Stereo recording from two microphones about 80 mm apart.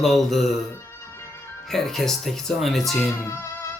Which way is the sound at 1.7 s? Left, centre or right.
Centre.